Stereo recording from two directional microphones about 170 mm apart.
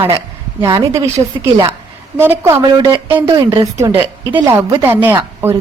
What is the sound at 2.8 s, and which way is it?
Speech, 25° right (ahead or behind).